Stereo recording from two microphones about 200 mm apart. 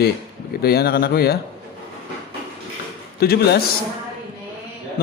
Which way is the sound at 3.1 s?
50° left (ahead or behind).